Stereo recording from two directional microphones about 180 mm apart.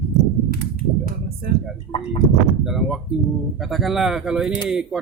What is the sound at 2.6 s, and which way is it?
Speech, centre (ahead or behind).